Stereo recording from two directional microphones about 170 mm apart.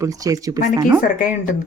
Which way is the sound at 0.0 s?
20° right (ahead or behind).